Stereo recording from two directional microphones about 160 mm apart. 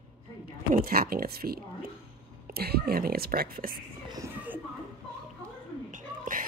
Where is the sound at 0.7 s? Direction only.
65° right (ahead or behind).